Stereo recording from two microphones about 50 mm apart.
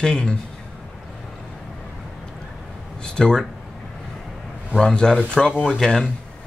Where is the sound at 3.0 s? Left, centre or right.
Centre.